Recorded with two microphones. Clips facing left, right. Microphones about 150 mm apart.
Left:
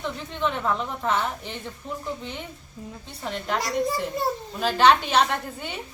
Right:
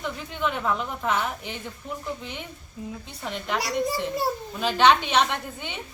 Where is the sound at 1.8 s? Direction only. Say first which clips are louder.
Left 1 dB; 35° left (ahead or behind).